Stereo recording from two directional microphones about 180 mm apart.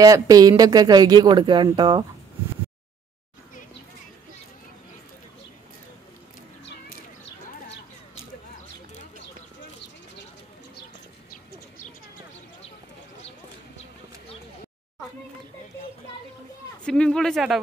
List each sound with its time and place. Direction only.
0.0 s speech: 20° right (ahead or behind)
16.8 s speech: 5° left (ahead or behind)